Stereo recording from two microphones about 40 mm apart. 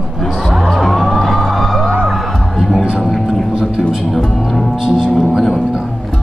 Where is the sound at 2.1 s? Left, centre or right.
Centre.